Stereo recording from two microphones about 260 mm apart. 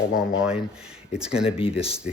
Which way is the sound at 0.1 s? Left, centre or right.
Centre.